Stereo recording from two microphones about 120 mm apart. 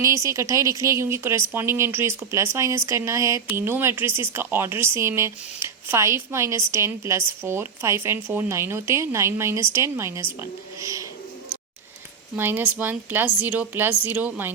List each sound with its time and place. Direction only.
0.0 s speech: 25° right (ahead or behind)
12.4 s a woman's voice: 15° right (ahead or behind)